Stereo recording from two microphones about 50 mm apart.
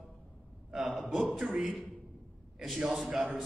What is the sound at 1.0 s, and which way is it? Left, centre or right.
Speech, centre.